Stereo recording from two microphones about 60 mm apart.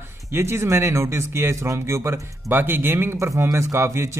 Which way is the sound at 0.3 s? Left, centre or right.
Right.